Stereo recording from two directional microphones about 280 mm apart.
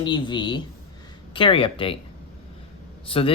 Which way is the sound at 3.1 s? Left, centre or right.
Centre.